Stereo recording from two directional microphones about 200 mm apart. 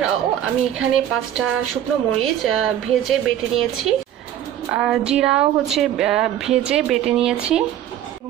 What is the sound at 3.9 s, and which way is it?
Speech, 30° right (ahead or behind).